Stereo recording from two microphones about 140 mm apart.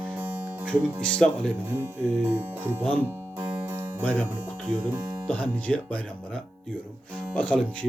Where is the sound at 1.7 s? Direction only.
15° right (ahead or behind).